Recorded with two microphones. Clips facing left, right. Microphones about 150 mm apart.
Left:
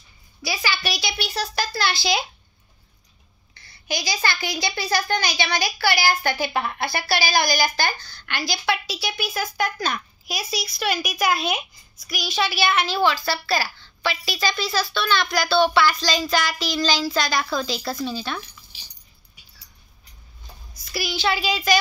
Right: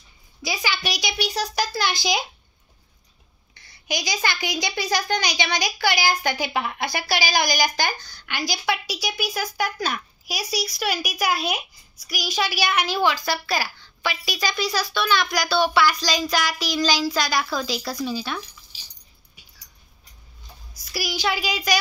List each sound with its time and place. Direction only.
0.4 s a child's voice: 20° right (ahead or behind)
3.6 s a child's voice: 15° right (ahead or behind)
20.8 s a child's voice: 10° right (ahead or behind)